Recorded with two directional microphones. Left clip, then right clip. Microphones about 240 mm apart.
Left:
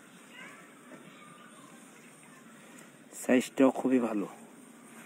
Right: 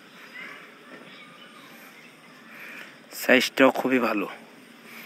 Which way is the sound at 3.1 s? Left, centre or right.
Centre.